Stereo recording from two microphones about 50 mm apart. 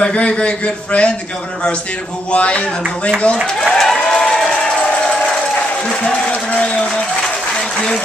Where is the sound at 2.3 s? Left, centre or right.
Left.